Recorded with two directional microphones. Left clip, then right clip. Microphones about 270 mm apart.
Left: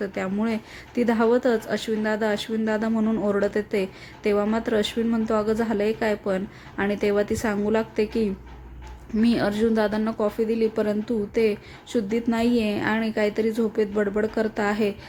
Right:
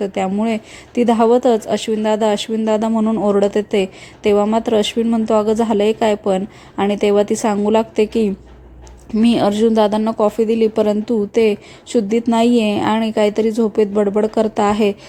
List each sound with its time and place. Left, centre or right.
0.0 s a woman's voice: centre